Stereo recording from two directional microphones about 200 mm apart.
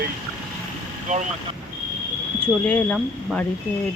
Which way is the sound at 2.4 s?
5° left (ahead or behind).